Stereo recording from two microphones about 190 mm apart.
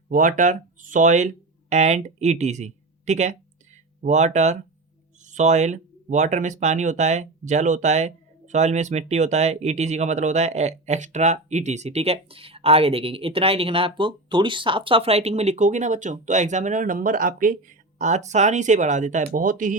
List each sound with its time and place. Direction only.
0.1 s speech: 45° right (ahead or behind)